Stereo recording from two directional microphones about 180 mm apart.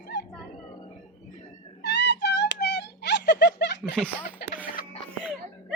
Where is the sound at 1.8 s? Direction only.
70° left (ahead or behind).